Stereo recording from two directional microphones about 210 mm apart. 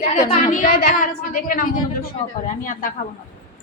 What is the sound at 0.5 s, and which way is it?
A woman's voice, 40° left (ahead or behind).